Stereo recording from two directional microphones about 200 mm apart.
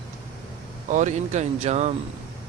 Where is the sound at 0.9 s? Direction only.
40° right (ahead or behind).